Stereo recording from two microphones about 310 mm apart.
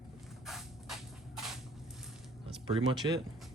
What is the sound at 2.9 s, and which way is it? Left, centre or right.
Speech, centre.